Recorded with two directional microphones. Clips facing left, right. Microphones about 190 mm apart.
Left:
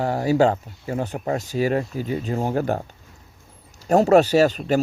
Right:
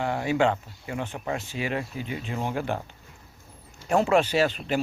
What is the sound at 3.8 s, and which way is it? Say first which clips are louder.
Speech: left 6 dB; 40° left (ahead or behind).